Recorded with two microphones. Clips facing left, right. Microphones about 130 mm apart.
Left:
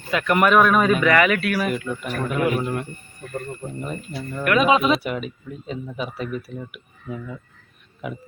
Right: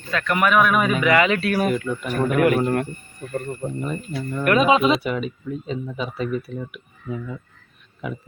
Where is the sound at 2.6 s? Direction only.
45° right (ahead or behind).